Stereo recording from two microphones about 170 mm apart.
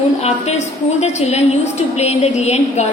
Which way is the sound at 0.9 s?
40° left (ahead or behind).